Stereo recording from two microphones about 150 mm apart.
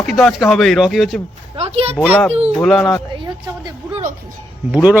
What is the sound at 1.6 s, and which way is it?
Speech, 45° right (ahead or behind).